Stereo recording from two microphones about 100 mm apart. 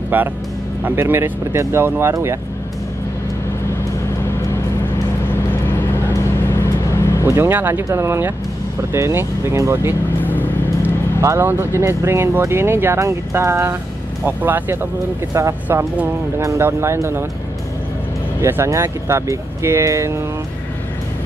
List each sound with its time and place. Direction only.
0.1 s speech: 20° right (ahead or behind)
5.5 s vehicle: 20° left (ahead or behind)
7.2 s speech: 25° right (ahead or behind)
18.4 s speech: 25° right (ahead or behind)